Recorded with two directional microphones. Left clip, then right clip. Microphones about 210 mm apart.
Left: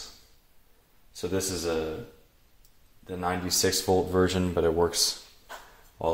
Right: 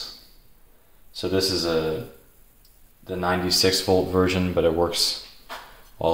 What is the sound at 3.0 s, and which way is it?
Speech, 40° left (ahead or behind).